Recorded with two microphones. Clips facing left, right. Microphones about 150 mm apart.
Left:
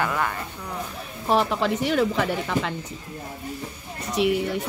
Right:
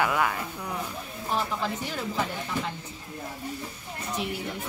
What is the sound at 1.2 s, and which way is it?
Speech, 75° left (ahead or behind).